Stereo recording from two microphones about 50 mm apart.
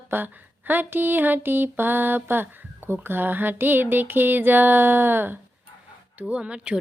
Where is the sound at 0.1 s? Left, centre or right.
Right.